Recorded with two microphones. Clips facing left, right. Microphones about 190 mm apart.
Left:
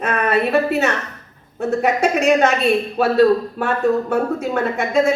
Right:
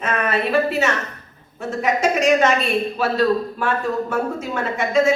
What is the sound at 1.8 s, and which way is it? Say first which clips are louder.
A man's voice: left 1 dB; 60° left (ahead or behind).